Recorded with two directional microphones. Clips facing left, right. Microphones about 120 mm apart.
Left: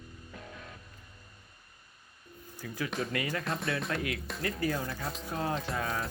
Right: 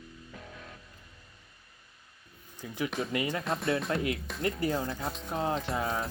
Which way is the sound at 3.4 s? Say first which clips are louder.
Right 3 dB; centre (ahead or behind).